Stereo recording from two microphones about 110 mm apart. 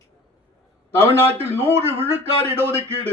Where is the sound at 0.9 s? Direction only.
20° right (ahead or behind).